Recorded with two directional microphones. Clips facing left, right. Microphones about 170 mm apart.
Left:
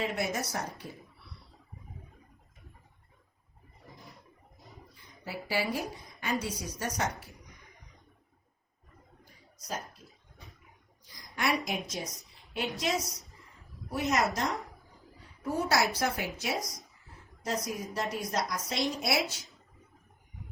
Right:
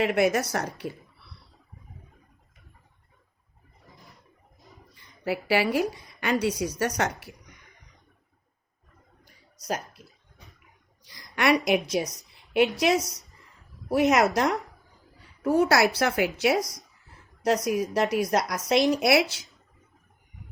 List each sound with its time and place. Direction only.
0.0 s a woman's voice: 75° right (ahead or behind)
5.2 s a woman's voice: 70° right (ahead or behind)
9.2 s a sound: 80° right
11.0 s a woman's voice: 75° right (ahead or behind)